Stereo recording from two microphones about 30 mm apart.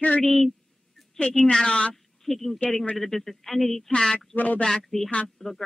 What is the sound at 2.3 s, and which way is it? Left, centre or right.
Speech, centre.